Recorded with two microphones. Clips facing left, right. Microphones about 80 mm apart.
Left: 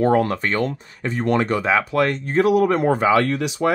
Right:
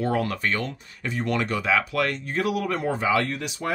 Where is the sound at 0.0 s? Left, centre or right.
Left.